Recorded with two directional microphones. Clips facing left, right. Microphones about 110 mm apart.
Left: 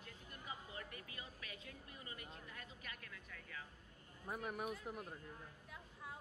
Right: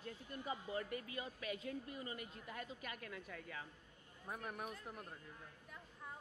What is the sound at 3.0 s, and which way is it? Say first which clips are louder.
Speech: right 7 dB; 45° right (ahead or behind).